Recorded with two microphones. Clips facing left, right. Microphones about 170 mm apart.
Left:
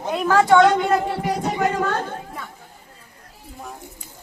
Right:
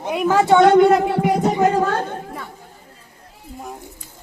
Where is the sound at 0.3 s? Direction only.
20° right (ahead or behind).